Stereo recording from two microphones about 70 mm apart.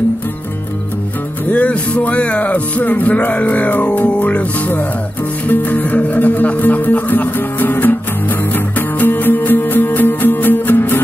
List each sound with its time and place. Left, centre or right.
1.5 s music: centre